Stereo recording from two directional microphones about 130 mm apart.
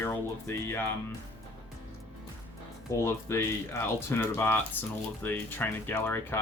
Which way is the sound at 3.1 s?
20° left (ahead or behind).